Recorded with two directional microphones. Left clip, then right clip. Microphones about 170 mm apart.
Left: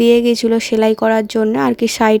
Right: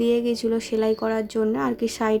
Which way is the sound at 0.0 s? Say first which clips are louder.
Left 10 dB; 50° left (ahead or behind).